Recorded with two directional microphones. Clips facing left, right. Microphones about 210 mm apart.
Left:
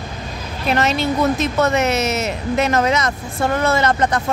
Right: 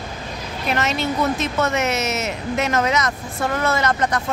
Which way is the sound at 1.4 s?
35° left (ahead or behind).